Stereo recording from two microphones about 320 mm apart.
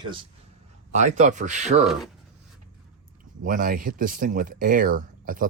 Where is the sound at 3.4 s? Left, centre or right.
Right.